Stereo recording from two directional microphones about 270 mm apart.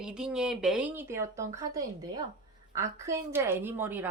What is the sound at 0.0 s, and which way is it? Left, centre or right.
A woman's voice, centre.